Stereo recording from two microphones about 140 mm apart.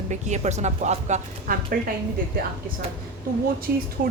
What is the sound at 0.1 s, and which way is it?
A woman's voice, 55° right (ahead or behind).